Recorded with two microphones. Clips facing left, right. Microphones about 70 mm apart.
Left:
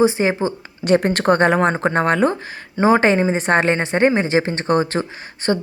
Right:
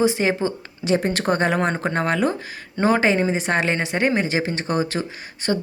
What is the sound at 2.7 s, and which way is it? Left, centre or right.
Speech, left.